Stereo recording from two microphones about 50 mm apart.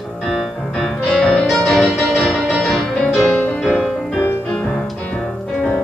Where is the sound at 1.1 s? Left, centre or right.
Centre.